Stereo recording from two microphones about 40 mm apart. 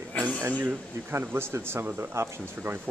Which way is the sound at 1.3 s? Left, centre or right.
Right.